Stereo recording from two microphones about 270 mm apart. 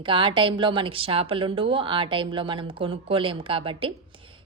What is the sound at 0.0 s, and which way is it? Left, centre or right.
A woman's voice, centre.